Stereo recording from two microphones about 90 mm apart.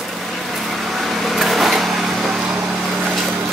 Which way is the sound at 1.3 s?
Centre (ahead or behind).